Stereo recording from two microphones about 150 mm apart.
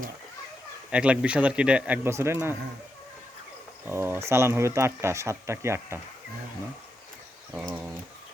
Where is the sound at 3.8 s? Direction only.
15° right (ahead or behind).